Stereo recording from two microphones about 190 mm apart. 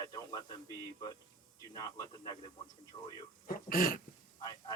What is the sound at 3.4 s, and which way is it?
Speech, 50° left (ahead or behind).